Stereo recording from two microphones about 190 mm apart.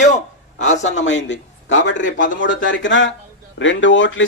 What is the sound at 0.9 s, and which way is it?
A man's voice, 80° left.